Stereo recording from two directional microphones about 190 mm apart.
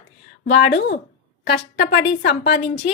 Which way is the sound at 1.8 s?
60° left (ahead or behind).